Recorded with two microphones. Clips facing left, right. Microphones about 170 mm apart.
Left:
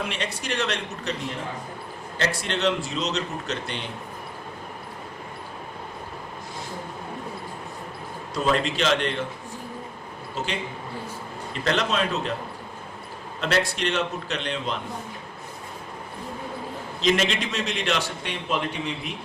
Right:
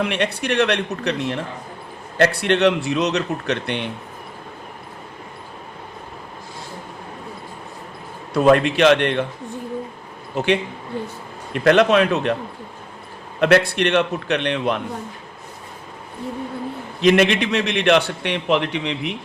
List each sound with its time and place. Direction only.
0.0 s a man's voice: 65° right (ahead or behind)
8.3 s a man's voice: 60° right (ahead or behind)
10.3 s a man's voice: 65° right (ahead or behind)
13.4 s a man's voice: 60° right (ahead or behind)
17.0 s a man's voice: 60° right (ahead or behind)